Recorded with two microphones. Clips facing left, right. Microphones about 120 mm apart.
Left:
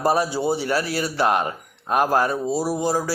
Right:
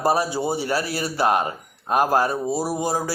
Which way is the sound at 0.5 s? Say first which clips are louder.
Left 1 dB; 40° right (ahead or behind).